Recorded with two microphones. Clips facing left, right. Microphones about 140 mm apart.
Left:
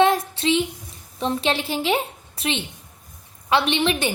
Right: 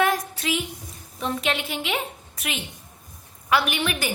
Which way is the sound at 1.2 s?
30° left (ahead or behind).